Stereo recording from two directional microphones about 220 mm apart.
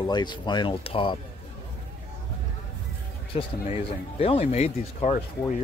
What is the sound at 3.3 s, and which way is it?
Speech, 25° left (ahead or behind).